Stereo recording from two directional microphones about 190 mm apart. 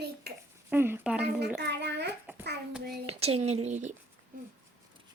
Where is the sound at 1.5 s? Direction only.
60° right (ahead or behind).